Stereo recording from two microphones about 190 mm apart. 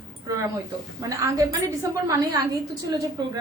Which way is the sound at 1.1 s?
15° right (ahead or behind).